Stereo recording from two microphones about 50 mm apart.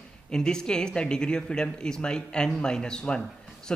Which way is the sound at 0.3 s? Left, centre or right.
Centre.